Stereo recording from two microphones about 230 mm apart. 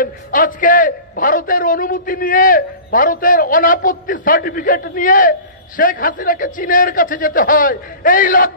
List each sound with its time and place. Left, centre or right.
0.0 s a man's voice: left